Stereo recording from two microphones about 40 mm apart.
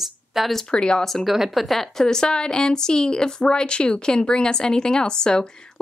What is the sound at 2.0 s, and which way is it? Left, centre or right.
Speech, centre.